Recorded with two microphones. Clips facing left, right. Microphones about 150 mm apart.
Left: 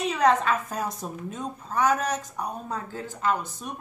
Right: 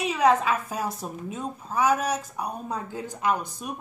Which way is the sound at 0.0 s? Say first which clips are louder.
Even; 5° right (ahead or behind).